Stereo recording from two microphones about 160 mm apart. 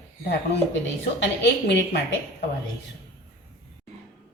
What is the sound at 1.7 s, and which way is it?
Speech, 90° left.